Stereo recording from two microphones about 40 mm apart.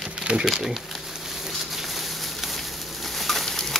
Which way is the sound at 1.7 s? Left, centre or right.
Centre.